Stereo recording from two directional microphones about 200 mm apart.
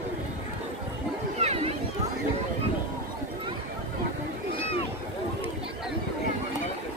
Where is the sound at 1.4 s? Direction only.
30° right (ahead or behind).